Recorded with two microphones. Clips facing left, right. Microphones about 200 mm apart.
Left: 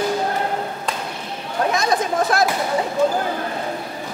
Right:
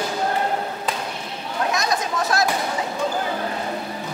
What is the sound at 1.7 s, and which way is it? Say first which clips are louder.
Chatter: left 5 dB; 55° left (ahead or behind).